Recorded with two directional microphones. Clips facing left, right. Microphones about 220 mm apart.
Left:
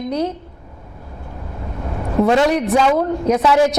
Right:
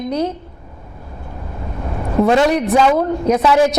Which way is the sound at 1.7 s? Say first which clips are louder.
Right 1 dB; 25° right (ahead or behind).